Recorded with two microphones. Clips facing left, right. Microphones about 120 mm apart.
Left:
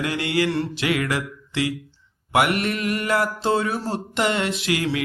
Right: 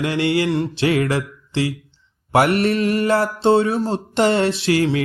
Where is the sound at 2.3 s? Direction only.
35° right (ahead or behind).